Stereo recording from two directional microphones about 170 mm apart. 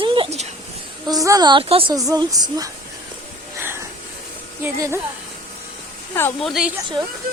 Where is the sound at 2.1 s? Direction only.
20° right (ahead or behind).